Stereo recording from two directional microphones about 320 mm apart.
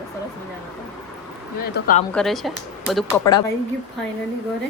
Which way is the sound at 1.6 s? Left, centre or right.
Left.